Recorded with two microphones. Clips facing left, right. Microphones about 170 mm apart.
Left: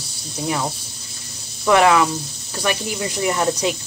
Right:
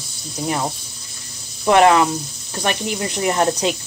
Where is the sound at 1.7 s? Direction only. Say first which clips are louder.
Right 2 dB; 30° right (ahead or behind).